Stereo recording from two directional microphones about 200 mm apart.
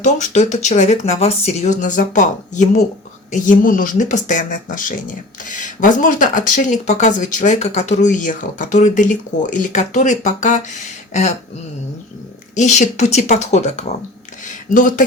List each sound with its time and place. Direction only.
0.0 s speech: 35° left (ahead or behind)
12.5 s speech: 35° left (ahead or behind)
14.4 s a sound: 40° left (ahead or behind)